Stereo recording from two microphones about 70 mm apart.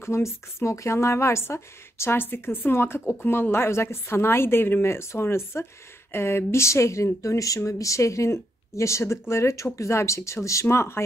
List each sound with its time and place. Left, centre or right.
0.0 s speech: left